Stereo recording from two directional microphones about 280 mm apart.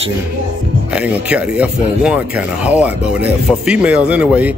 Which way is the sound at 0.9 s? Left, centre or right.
Centre.